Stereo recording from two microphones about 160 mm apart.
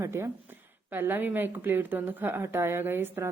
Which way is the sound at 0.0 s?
15° right (ahead or behind).